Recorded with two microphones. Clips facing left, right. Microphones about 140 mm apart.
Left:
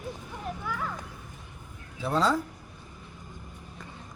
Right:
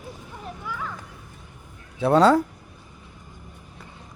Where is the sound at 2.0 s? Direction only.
70° right (ahead or behind).